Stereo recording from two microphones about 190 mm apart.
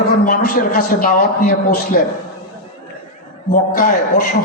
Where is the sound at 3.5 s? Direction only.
50° left (ahead or behind).